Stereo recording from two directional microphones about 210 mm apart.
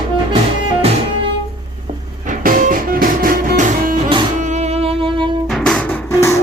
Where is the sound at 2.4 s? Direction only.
40° right (ahead or behind).